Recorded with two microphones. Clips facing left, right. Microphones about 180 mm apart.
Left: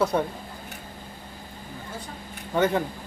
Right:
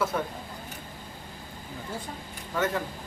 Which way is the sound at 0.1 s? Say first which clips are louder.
Left 5 dB; 30° left (ahead or behind).